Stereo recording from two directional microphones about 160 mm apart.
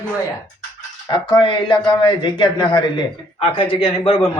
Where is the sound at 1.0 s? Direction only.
30° left (ahead or behind).